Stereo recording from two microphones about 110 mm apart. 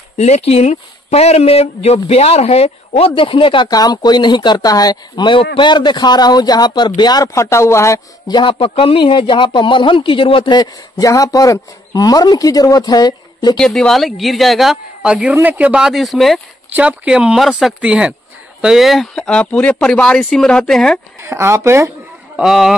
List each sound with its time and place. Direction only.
0.2 s speech: 85° left; by 3.1 s 65° left (ahead or behind)
3.2 s a man's voice: 50° left (ahead or behind); by 8.0 s 25° left (ahead or behind)
8.3 s a man's voice: 45° left (ahead or behind)
13.6 s a woman's voice: 5° left (ahead or behind)
16.7 s speech: 10° right (ahead or behind); by 21.0 s 5° left (ahead or behind)
21.2 s speech: 25° right (ahead or behind)
22.4 s a woman's voice: centre (ahead or behind)